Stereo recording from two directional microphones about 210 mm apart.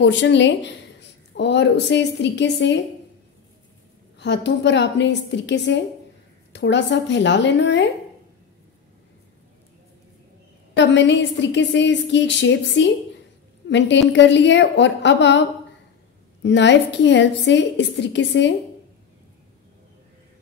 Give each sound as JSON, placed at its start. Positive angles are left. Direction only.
{"t": 0.0, "sound": "a woman's voice", "side_deg": 60}
{"t": 4.2, "sound": "a woman's voice", "side_deg": 55}
{"t": 10.8, "sound": "a woman's voice", "side_deg": 60}
{"t": 16.4, "sound": "a woman's voice", "side_deg": 55}